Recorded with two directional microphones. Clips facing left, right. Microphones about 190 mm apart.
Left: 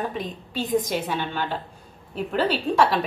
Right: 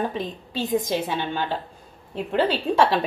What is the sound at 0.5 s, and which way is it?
A woman's voice, 25° right (ahead or behind).